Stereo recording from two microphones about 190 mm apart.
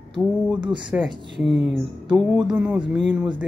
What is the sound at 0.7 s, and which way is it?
Speech, 25° right (ahead or behind).